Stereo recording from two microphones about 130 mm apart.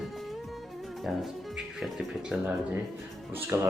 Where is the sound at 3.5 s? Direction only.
20° right (ahead or behind).